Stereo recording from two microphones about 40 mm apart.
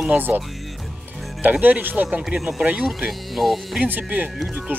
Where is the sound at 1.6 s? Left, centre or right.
Right.